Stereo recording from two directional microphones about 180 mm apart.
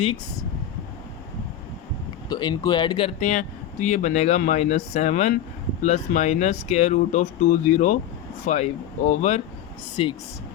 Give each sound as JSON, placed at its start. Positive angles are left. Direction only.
{"t": 2.3, "sound": "speech", "side_deg": 25}
{"t": 3.2, "sound": "speech", "side_deg": 40}
{"t": 10.0, "sound": "speech", "side_deg": 30}